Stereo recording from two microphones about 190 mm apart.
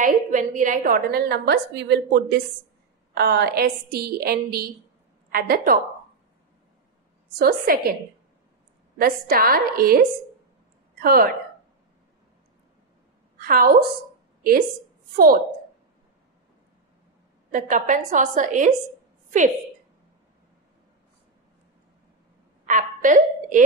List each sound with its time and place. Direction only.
0.0 s a woman's voice: 40° right (ahead or behind)
7.3 s a woman's voice: 55° right (ahead or behind)
8.9 s a woman's voice: 50° right (ahead or behind)
11.0 s a woman's voice: 50° right (ahead or behind)
13.5 s a woman's voice: 50° right (ahead or behind)
15.1 s a woman's voice: 50° right (ahead or behind)
17.5 s a woman's voice: 40° right (ahead or behind)
22.7 s hiccup: 45° right (ahead or behind)